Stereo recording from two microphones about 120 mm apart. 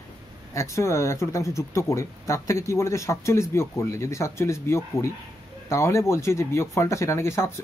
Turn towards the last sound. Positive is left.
turn(degrees=20)  # may be behind; listen again after turning